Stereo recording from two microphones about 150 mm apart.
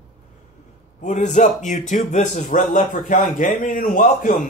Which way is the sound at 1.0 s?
55° left (ahead or behind).